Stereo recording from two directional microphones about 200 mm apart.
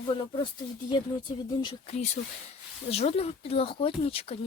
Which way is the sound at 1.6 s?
25° left (ahead or behind).